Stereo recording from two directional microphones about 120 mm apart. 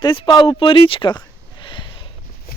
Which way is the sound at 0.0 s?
45° left (ahead or behind).